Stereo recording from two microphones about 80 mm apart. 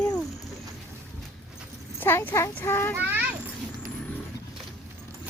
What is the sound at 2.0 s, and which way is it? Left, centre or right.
Speech, left.